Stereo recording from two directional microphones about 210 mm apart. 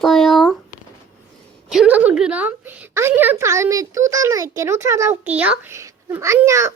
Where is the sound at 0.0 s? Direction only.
Centre (ahead or behind).